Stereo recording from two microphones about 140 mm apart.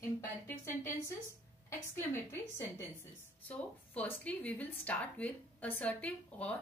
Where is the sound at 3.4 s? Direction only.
10° left (ahead or behind).